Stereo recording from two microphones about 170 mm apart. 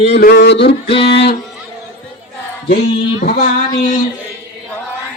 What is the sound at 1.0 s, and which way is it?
Speech, 75° left (ahead or behind).